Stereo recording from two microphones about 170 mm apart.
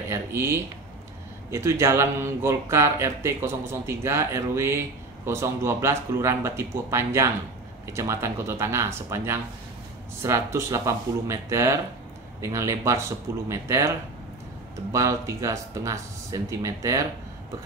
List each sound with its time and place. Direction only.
0.1 s speech: 15° right (ahead or behind)